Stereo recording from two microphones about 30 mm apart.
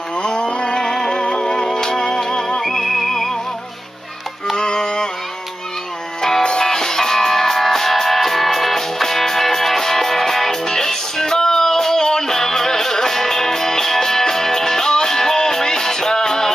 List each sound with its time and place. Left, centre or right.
0.2 s music: left
0.7 s music: left
2.6 s music: centre
4.6 s music: left
6.6 s music: centre